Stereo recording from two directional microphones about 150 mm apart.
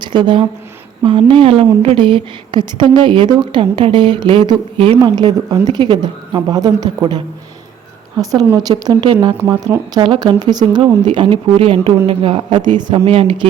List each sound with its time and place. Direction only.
0.0 s a woman's voice: 30° right (ahead or behind)
8.2 s a woman's voice: 25° right (ahead or behind)